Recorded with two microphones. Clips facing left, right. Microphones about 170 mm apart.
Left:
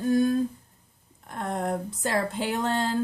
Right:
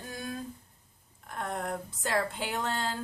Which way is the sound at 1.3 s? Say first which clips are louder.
Left 6 dB; 35° left (ahead or behind).